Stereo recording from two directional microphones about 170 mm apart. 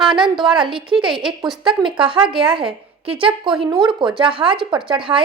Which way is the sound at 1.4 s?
Centre (ahead or behind).